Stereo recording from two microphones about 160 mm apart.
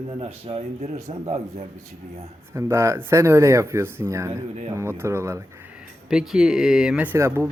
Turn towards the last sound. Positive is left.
turn(degrees=-15)  # may be behind; listen again after turning